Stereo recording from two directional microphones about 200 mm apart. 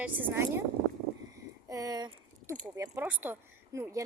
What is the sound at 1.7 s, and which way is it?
Speech, 15° right (ahead or behind).